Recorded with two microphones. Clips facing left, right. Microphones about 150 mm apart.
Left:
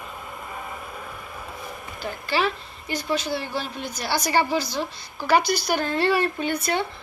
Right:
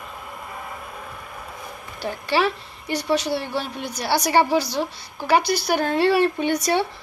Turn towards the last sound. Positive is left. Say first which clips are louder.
# right 4 dB
turn(degrees=-75)  # may be behind; listen again after turning